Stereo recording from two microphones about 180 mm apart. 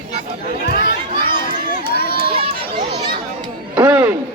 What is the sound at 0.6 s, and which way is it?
Speech, 65° left (ahead or behind).